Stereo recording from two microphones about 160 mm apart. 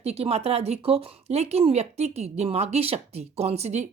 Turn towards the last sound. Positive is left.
turn(degrees=-45)  # may be behind; listen again after turning